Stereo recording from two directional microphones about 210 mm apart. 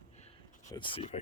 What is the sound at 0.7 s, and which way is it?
Speech, 25° left (ahead or behind).